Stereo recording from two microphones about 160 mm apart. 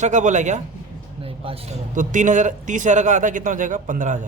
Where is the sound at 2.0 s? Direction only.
50° right (ahead or behind).